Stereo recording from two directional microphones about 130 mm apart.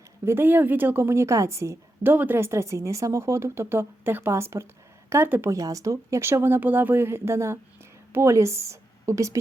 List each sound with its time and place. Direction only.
0.3 s a woman's voice: 15° right (ahead or behind)